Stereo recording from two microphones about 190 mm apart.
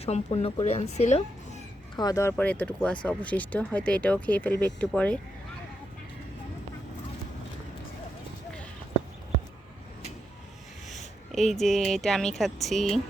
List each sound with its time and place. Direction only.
0.0 s speech: 35° left (ahead or behind)
2.0 s speech: 20° left (ahead or behind)
2.3 s speech: 5° left (ahead or behind)
10.8 s a woman's voice: centre (ahead or behind)